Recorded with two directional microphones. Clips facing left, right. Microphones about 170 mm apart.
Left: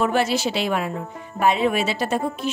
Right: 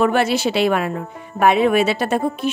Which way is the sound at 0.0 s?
60° right (ahead or behind).